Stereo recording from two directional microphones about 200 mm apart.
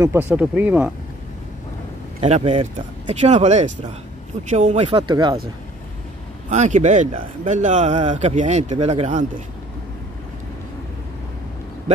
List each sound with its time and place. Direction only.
0.0 s speech: 10° right (ahead or behind)
2.1 s a man's voice: 30° right (ahead or behind)
6.5 s a man's voice: 35° right (ahead or behind)